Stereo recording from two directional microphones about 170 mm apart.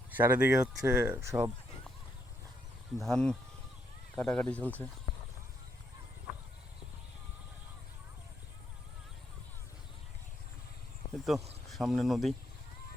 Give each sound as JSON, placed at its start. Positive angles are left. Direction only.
{"t": 0.1, "sound": "speech", "side_deg": -10}
{"t": 3.0, "sound": "speech", "side_deg": 5}
{"t": 11.1, "sound": "speech", "side_deg": 0}